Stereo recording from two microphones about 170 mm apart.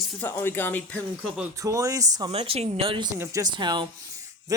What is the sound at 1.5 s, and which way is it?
Speech, 20° right (ahead or behind).